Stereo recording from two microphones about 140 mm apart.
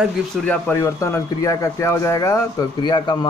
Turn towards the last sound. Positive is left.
turn(degrees=30)  # may be behind; listen again after turning